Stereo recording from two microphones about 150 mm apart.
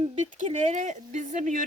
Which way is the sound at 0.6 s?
55° right (ahead or behind).